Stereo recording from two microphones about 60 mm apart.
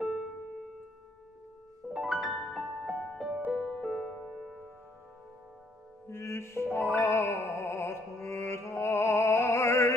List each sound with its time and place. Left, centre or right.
2.0 s music: centre
4.1 s music: centre
6.0 s music: left